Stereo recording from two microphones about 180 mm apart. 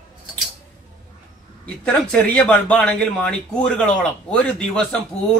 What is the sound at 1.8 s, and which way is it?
Speech, 5° left (ahead or behind).